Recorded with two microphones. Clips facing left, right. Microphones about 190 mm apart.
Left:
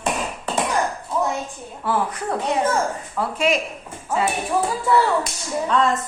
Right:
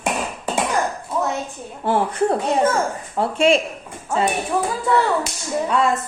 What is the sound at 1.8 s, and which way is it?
A woman's voice, 30° right (ahead or behind).